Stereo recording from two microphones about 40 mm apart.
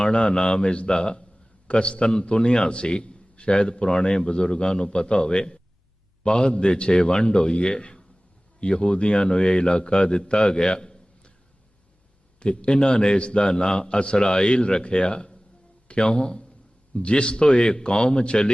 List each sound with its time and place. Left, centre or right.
0.0 s a man's voice: left
12.4 s a man's voice: left